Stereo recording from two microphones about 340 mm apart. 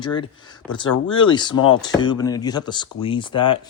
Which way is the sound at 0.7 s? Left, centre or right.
Centre.